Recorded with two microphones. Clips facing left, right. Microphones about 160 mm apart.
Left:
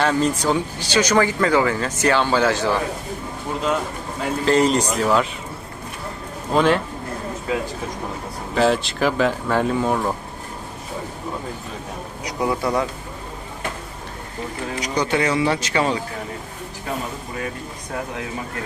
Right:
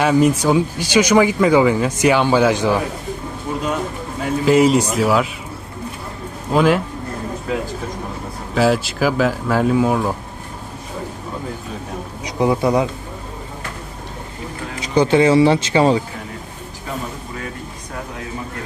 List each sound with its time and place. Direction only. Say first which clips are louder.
0.0 s speech: right 5 dB; 10° right (ahead or behind)
4.4 s speech: right 4 dB; 5° right (ahead or behind)
6.5 s speech: right 2 dB; 5° right (ahead or behind)
8.5 s speech: right 2 dB; 5° right (ahead or behind)
12.2 s speech: right 5 dB; 20° right (ahead or behind)
14.8 s speech: right 8 dB; 30° right (ahead or behind)